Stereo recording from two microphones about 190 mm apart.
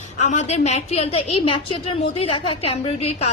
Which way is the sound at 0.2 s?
35° left (ahead or behind).